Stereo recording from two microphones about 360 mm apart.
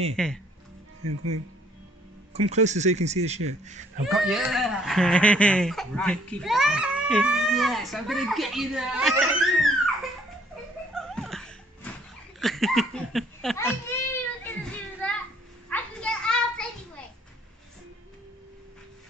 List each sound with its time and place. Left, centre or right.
0.1 s speech: centre
1.0 s speech: right
2.3 s speech: centre
4.2 s speech: centre
10.9 s a sound: centre
12.4 s speech: centre
14.4 s a sound: centre
15.7 s children playing: centre